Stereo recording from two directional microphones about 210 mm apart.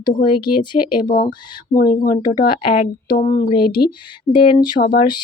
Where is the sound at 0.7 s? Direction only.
20° left (ahead or behind).